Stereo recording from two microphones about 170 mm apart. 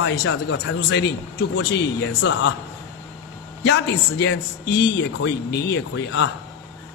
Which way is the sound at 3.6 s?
90° left.